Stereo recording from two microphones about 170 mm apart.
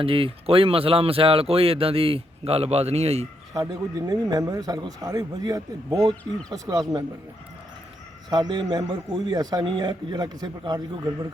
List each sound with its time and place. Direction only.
0.0 s speech: 30° right (ahead or behind)
3.5 s speech: 20° right (ahead or behind)
8.3 s speech: 25° right (ahead or behind)